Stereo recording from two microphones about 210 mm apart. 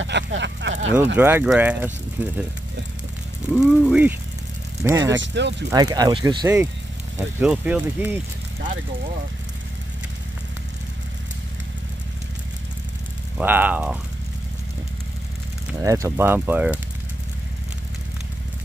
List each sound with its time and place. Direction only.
0.0 s speech: 60° right (ahead or behind)
1.1 s speech: 10° right (ahead or behind)
3.5 s speech: 5° right (ahead or behind)
4.8 s speech: 15° right (ahead or behind)
5.1 s speech: 60° right (ahead or behind)
5.7 s speech: 20° right (ahead or behind)
13.4 s speech: 10° right (ahead or behind)
15.8 s speech: 15° right (ahead or behind)